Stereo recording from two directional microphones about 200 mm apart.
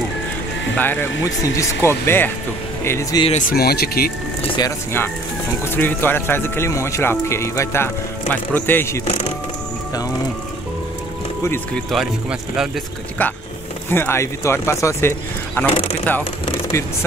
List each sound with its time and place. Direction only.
0.7 s speech: 10° left (ahead or behind)
3.3 s speech: 40° left (ahead or behind)
4.6 s speech: 15° left (ahead or behind)
11.4 s speech: 10° left (ahead or behind)
11.9 s speech: centre (ahead or behind)
13.2 s speech: 10° left (ahead or behind)